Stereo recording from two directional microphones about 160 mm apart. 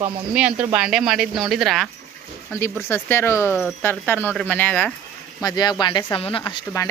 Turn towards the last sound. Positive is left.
turn(degrees=30)  # may be behind; listen again after turning